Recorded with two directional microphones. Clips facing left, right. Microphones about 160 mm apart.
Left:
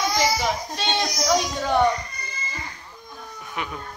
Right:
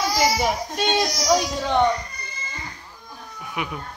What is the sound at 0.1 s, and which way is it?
Speech, 10° right (ahead or behind).